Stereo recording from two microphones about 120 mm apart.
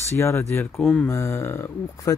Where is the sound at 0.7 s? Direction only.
Centre (ahead or behind).